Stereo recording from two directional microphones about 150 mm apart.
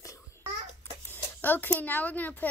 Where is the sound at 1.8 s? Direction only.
10° left (ahead or behind).